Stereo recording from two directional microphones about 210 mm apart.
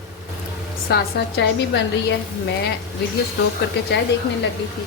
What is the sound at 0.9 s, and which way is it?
A woman's voice, 50° left (ahead or behind).